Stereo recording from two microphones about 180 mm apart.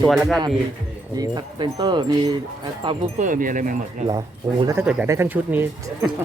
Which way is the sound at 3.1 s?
45° right (ahead or behind).